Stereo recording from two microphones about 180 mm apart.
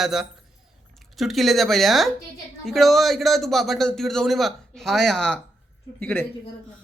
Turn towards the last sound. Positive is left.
turn(degrees=10)  # may be behind; listen again after turning